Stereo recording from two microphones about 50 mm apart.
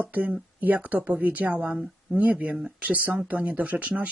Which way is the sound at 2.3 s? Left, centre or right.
Right.